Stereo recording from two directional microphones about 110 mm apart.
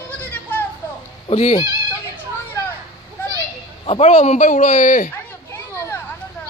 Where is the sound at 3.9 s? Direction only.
70° left (ahead or behind); by 4.8 s 90° left.